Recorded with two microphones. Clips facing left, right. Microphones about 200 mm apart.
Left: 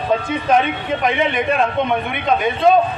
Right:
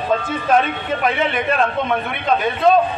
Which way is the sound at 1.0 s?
5° right (ahead or behind).